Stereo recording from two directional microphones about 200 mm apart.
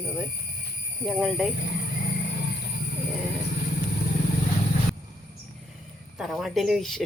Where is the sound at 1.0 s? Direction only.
Centre (ahead or behind).